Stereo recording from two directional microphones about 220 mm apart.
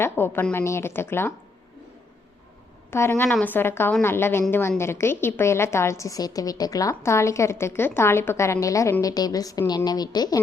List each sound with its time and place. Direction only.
0.0 s a woman's voice: 10° left (ahead or behind)
2.9 s a woman's voice: 10° left (ahead or behind)